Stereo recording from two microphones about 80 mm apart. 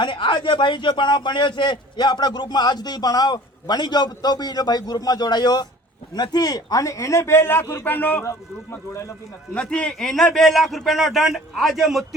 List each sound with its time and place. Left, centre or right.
0.0 s a man's voice: left
8.9 s a man's voice: left
9.6 s a man's voice: centre